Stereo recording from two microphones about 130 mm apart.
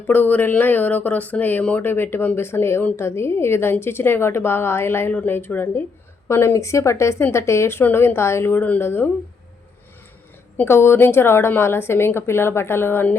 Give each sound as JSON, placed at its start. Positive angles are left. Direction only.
{"t": 0.1, "sound": "speech", "side_deg": 15}
{"t": 10.6, "sound": "speech", "side_deg": 20}